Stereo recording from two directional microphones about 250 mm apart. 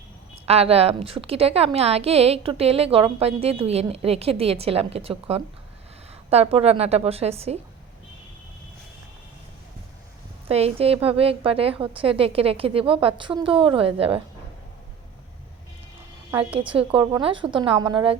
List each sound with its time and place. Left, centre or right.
0.4 s a woman's voice: right
10.5 s a woman's voice: right
16.6 s a woman's voice: right